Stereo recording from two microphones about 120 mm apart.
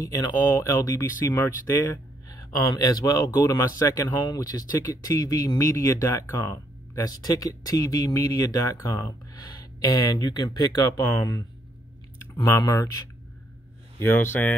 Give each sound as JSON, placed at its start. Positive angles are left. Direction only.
{"t": 0.0, "sound": "speech", "side_deg": 30}
{"t": 2.2, "sound": "speech", "side_deg": 30}
{"t": 4.1, "sound": "speech", "side_deg": 35}
{"t": 12.4, "sound": "speech", "side_deg": 35}
{"t": 13.9, "sound": "speech", "side_deg": 20}